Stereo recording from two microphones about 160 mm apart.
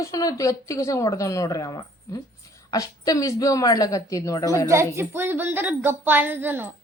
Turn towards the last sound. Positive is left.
turn(degrees=-10)  # may be behind; listen again after turning